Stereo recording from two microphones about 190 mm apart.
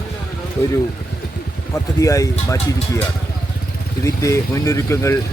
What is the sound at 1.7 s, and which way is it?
Speech, 15° left (ahead or behind).